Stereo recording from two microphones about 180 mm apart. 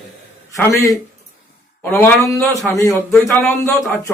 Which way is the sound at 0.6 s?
15° left (ahead or behind).